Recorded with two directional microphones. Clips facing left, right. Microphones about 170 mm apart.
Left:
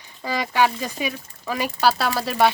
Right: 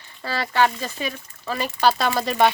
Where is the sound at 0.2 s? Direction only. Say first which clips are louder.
Even; 15° left (ahead or behind).